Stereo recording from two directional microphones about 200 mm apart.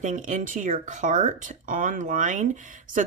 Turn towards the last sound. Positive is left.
turn(degrees=-35)  # may be behind; listen again after turning